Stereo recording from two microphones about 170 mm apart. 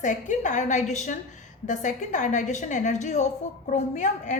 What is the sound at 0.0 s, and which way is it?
A woman's voice, 45° left (ahead or behind).